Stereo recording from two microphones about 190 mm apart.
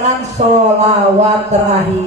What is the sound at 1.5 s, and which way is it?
Speech, 35° right (ahead or behind).